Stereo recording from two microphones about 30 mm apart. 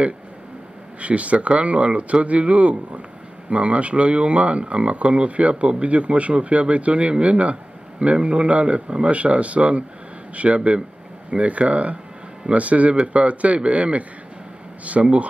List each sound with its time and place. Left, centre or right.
1.0 s speech: right
14.9 s speech: right